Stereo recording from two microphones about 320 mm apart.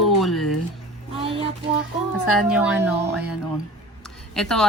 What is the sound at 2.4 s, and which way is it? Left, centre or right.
Speech, centre.